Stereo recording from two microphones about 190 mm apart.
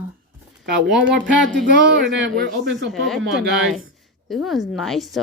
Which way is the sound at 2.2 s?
70° right (ahead or behind).